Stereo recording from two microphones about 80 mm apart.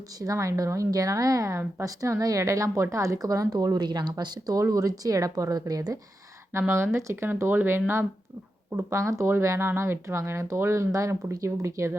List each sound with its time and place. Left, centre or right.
0.2 s speech: right
6.5 s speech: right
8.7 s speech: right